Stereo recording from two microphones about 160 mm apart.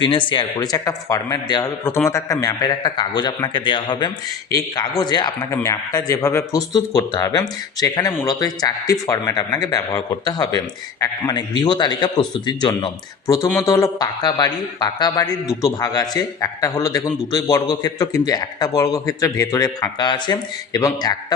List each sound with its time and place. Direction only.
0.0 s a man's voice: 30° left (ahead or behind)
5.4 s a man's voice: 15° left (ahead or behind)